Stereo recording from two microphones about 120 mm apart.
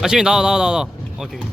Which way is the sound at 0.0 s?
5° right (ahead or behind).